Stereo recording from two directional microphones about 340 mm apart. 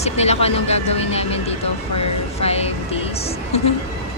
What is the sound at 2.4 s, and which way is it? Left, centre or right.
Music, centre.